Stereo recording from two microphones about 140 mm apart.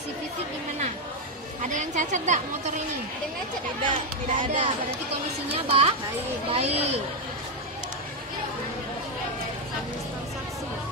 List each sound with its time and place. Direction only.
1.6 s a woman's voice: 65° right (ahead or behind)
4.4 s speech: 40° right (ahead or behind)